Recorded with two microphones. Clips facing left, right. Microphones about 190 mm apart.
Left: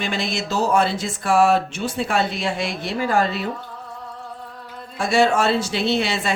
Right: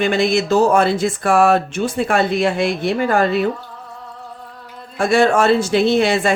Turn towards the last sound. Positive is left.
turn(degrees=-50)  # may be behind; listen again after turning